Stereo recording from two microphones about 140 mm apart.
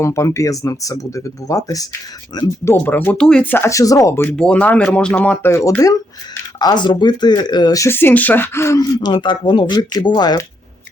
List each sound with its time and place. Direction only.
0.0 s speech: 20° left (ahead or behind)
2.6 s speech: 15° left (ahead or behind)
9.0 s speech: 35° left (ahead or behind)